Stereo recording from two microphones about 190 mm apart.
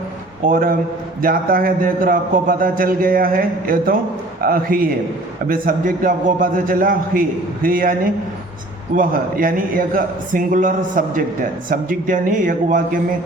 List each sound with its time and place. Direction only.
0.4 s a man's voice: 45° right (ahead or behind)
9.0 s a man's voice: 50° right (ahead or behind)